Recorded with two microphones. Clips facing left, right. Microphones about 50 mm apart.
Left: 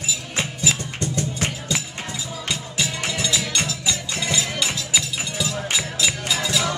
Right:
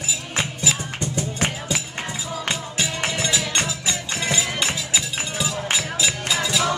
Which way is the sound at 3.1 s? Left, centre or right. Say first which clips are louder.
Right 1 dB; right.